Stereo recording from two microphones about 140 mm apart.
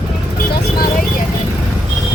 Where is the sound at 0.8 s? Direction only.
90° left.